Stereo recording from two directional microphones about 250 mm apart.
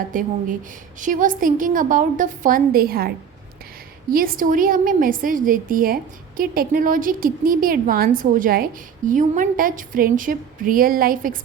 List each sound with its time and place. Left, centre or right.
0.1 s a woman's voice: right
4.1 s a woman's voice: right